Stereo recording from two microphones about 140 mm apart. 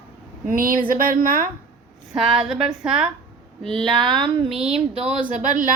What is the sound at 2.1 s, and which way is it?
A woman's voice, 5° right (ahead or behind).